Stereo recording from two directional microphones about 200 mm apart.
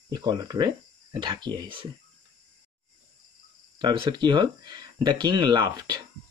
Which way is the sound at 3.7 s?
25° right (ahead or behind).